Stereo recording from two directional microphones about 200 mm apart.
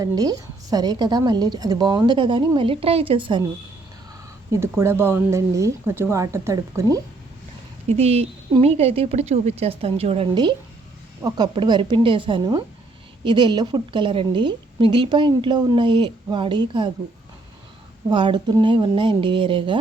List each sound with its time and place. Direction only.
0.0 s a woman's voice: 20° right (ahead or behind)
4.5 s a woman's voice: 15° right (ahead or behind)
7.9 s a woman's voice: 30° right (ahead or behind)
18.1 s a woman's voice: 25° right (ahead or behind)